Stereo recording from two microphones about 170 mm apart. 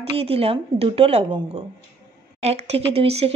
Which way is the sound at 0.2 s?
35° right (ahead or behind).